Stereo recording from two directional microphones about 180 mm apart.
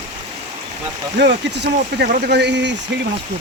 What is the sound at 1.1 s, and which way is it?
Speech, 70° right (ahead or behind).